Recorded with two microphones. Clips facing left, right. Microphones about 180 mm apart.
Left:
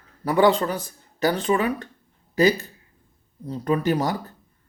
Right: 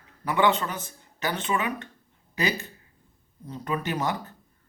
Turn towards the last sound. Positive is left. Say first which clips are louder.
# left 6 dB
turn(degrees=35)  # may be behind; listen again after turning